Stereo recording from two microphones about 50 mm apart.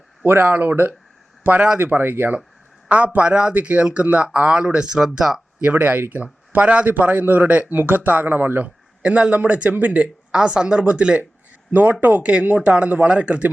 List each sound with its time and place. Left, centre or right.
0.3 s speech: right
2.9 s speech: right; by 5.4 s centre
5.7 s speech: right
10.3 s speech: centre
11.7 s speech: right
12.2 s speech: right